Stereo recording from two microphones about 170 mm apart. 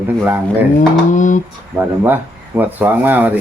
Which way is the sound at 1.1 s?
50° left (ahead or behind).